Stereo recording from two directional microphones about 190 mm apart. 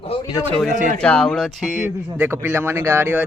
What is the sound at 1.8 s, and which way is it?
Speech, 10° right (ahead or behind).